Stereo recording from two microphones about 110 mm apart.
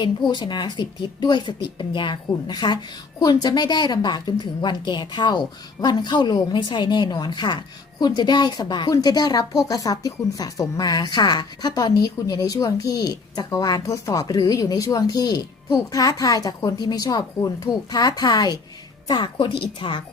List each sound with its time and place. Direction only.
0.0 s a woman's voice: 45° left (ahead or behind)